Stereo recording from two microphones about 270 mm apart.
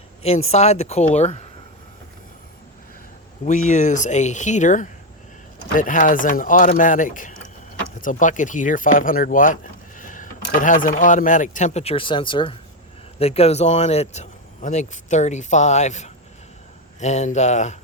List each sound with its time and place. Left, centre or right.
0.2 s speech: left
3.7 s speech: left